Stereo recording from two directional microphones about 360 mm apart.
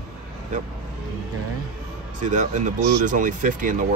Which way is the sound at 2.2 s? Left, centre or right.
Centre.